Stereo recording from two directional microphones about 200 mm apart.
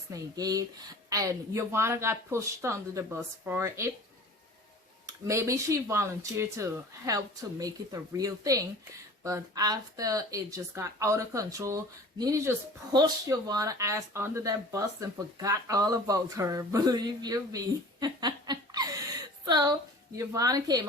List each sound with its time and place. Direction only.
0.1 s speech: 15° right (ahead or behind)
5.3 s speech: 15° right (ahead or behind)
18.0 s laughter: 20° right (ahead or behind)
19.5 s a woman's voice: 20° right (ahead or behind)